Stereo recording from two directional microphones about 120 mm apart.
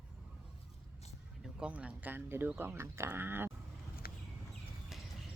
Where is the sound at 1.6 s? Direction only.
10° right (ahead or behind).